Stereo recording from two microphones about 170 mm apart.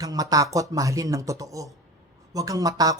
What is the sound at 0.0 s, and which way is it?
Speech, 20° right (ahead or behind).